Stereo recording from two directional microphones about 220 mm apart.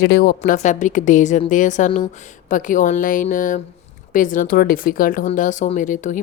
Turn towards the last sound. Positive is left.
turn(degrees=35)  # may be behind; listen again after turning